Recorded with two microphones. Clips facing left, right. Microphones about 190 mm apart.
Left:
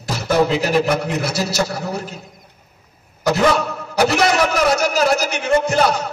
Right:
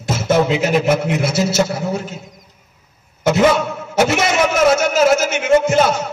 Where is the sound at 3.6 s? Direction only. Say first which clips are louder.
Right 1 dB; 25° right (ahead or behind).